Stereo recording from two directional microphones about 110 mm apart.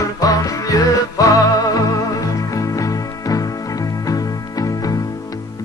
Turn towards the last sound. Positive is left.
turn(degrees=30)  # may be behind; listen again after turning